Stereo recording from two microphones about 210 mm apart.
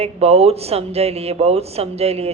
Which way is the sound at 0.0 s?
30° right (ahead or behind).